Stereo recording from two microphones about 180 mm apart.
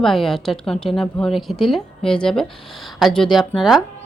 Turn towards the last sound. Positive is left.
turn(degrees=0)  # may be behind; listen again after turning